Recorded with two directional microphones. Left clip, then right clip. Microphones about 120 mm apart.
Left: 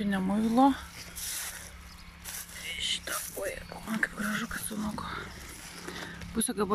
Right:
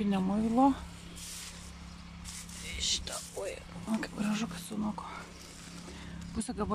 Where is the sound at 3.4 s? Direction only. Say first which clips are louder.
Left 3 dB; 25° right (ahead or behind).